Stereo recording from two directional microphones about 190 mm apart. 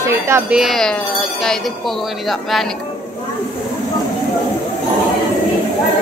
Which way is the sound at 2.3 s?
Centre (ahead or behind).